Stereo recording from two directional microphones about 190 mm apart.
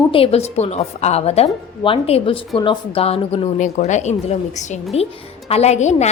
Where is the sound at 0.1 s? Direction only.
30° left (ahead or behind).